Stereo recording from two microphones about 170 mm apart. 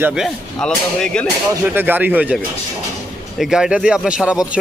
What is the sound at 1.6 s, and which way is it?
Speech, 10° right (ahead or behind).